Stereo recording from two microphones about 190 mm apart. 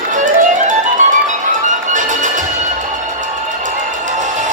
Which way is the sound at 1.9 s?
40° right (ahead or behind).